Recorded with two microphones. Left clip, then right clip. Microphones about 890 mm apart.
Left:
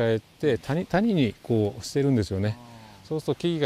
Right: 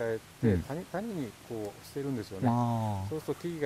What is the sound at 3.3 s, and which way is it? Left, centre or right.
Speech, left.